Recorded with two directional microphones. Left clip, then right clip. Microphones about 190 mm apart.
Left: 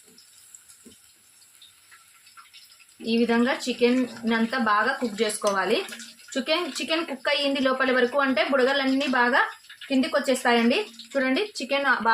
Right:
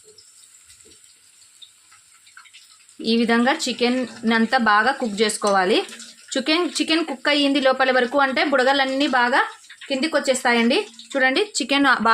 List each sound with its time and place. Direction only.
3.0 s speech: 60° right (ahead or behind)